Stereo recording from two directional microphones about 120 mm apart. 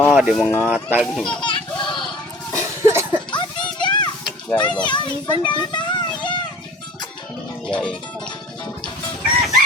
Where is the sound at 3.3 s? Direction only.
40° left (ahead or behind).